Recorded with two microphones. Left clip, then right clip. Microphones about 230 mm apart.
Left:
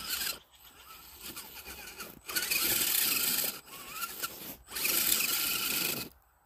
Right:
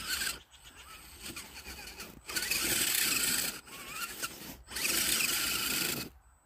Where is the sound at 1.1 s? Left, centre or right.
Centre.